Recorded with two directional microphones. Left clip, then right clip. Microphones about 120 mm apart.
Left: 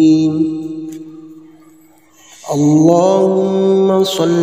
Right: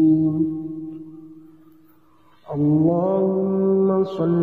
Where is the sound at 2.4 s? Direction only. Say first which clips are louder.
Left 9 dB; 65° left (ahead or behind).